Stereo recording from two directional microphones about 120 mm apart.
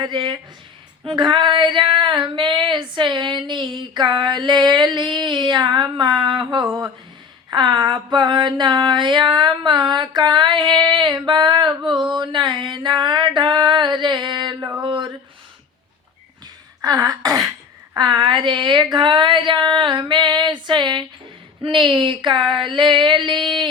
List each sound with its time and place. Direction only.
0.0 s female singing: 40° right (ahead or behind)
6.7 s speech: 15° right (ahead or behind)
7.5 s female singing: 40° right (ahead or behind)
12.7 s a sound: 40° right (ahead or behind)
16.8 s throat clearing: 30° right (ahead or behind)
17.9 s a sound: 35° right (ahead or behind)
21.6 s female singing: 45° right (ahead or behind)